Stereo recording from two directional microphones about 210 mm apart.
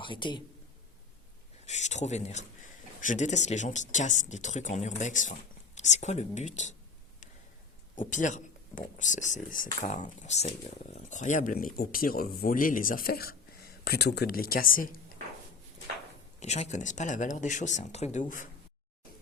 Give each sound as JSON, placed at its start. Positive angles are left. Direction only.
{"t": 0.0, "sound": "a man's voice", "side_deg": 25}
{"t": 1.6, "sound": "speech", "side_deg": 35}
{"t": 7.9, "sound": "speech", "side_deg": 35}
{"t": 16.4, "sound": "speech", "side_deg": 30}